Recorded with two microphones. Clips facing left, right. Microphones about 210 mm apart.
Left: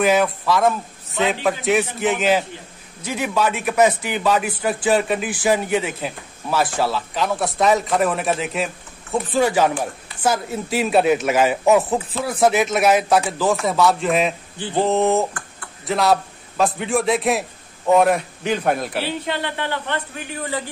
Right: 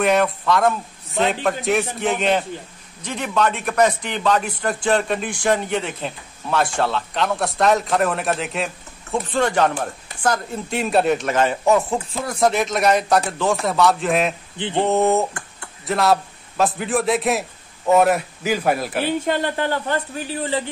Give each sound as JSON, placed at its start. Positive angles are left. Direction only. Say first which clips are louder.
{"t": 0.0, "sound": "a man's voice", "louder": "left 1 dB", "side_deg": 0}
{"t": 19.0, "sound": "a man's voice", "louder": "right 4 dB", "side_deg": -45}
{"t": 20.4, "sound": "a man's voice", "louder": "right 2 dB", "side_deg": -25}